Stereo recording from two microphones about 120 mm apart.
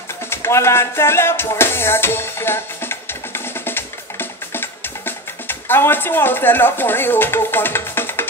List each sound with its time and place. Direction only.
0.3 s music: 20° left (ahead or behind)